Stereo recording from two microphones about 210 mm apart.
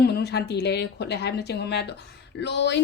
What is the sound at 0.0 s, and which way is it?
A woman's voice, 50° left (ahead or behind).